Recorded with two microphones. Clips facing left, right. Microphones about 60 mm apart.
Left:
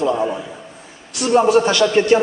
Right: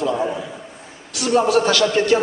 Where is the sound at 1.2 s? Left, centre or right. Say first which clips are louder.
Left 3 dB; left.